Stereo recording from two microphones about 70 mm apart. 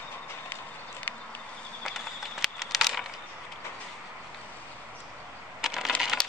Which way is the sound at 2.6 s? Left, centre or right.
Centre.